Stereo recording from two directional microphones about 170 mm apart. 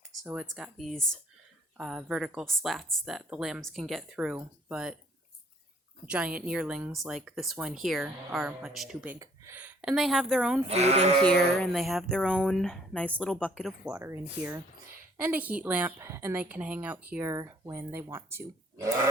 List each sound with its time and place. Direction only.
0.3 s speech: 5° right (ahead or behind)
6.1 s speech: 10° right (ahead or behind)
9.1 s speech: 15° right (ahead or behind)
10.7 s speech: 40° right (ahead or behind)
11.3 s speech: centre (ahead or behind)
14.0 s a woman's voice: 15° right (ahead or behind)